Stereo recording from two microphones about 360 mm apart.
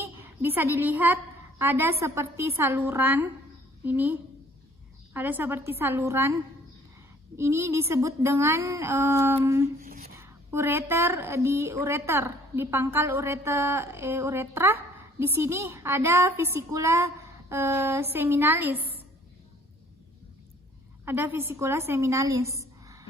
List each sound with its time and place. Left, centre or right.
0.0 s a woman's voice: centre
7.3 s a woman's voice: centre
9.8 s a sound: right
10.2 s a woman's voice: centre
21.0 s a woman's voice: centre